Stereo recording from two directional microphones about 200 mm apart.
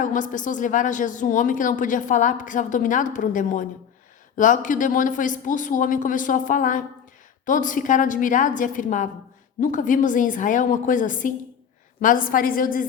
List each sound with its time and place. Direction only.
0.0 s a woman's voice: 40° left (ahead or behind)